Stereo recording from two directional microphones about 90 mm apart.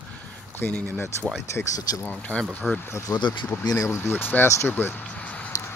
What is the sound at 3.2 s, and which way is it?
Speech, 60° left (ahead or behind).